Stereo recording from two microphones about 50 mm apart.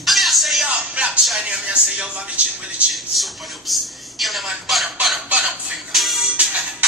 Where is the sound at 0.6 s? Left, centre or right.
Centre.